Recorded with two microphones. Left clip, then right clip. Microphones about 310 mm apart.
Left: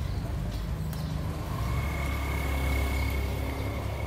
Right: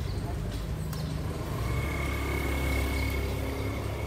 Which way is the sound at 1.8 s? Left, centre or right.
Left.